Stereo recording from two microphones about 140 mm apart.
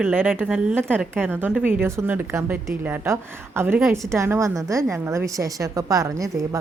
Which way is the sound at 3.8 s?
5° right (ahead or behind).